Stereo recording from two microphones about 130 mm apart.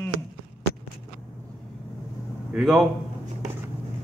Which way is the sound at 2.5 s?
Centre (ahead or behind).